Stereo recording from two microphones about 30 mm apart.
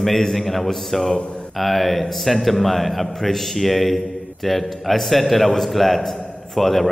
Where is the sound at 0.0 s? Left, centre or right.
Centre.